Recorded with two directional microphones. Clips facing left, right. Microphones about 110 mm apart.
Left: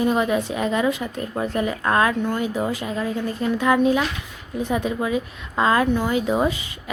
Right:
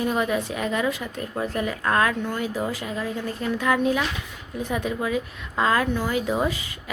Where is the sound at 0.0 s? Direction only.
20° left (ahead or behind).